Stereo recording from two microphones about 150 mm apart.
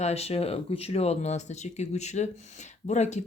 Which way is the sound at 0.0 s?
45° left (ahead or behind).